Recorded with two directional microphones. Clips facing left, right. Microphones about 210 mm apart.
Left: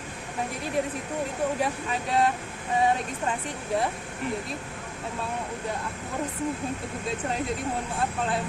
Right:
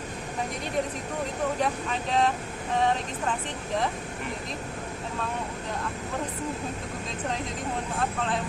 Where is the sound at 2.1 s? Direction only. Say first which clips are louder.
Left 1 dB; 10° left (ahead or behind).